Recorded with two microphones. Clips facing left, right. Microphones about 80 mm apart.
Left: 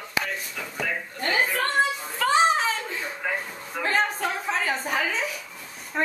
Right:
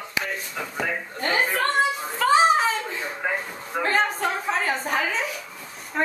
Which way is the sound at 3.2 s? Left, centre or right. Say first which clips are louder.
Right 4 dB; centre.